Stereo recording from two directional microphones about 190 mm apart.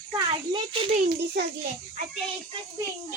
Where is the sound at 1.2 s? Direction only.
60° right (ahead or behind).